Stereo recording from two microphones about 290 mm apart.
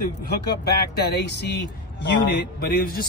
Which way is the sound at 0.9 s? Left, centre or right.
Left.